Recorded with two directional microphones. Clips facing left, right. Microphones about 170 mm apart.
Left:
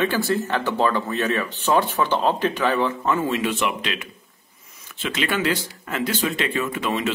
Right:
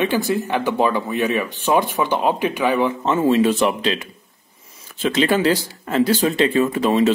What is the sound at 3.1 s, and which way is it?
Speech, 30° right (ahead or behind).